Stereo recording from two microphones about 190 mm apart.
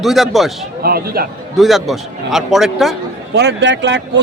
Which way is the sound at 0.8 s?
55° right (ahead or behind).